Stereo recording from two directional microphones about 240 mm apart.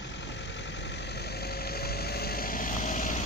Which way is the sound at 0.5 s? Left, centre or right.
Left.